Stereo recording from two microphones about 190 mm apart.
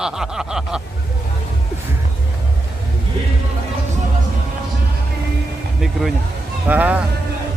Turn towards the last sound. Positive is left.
turn(degrees=-10)  # may be behind; listen again after turning